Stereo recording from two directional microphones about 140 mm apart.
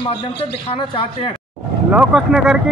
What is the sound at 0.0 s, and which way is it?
A man's voice, 40° left (ahead or behind).